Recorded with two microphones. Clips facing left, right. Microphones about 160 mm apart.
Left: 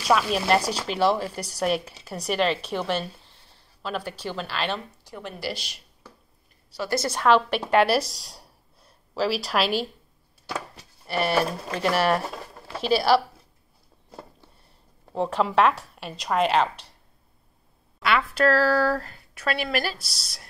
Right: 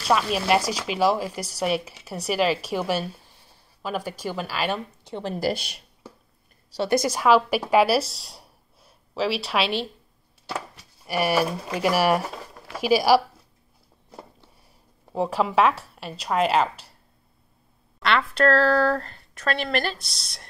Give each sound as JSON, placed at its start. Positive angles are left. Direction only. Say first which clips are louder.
{"t": 0.0, "sound": "a woman's voice", "louder": "even", "side_deg": 0}
{"t": 5.0, "sound": "speech", "louder": "right 7 dB", "side_deg": -30}
{"t": 5.5, "sound": "speech", "louder": "right 6 dB", "side_deg": -55}
{"t": 6.8, "sound": "a woman's voice", "louder": "right 3 dB", "side_deg": -15}
{"t": 11.1, "sound": "speech", "louder": "right 1 dB", "side_deg": -10}
{"t": 15.1, "sound": "a woman's voice", "louder": "even", "side_deg": -5}
{"t": 18.0, "sound": "a woman's voice", "louder": "right 1 dB", "side_deg": 5}